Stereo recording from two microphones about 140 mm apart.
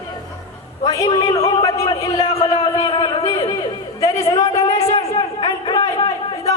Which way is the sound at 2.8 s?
35° left (ahead or behind).